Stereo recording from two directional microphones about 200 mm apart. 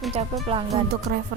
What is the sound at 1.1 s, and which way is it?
Music, 55° right (ahead or behind).